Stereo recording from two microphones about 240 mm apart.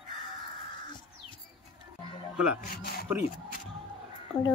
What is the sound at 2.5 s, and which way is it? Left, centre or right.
Speech, left.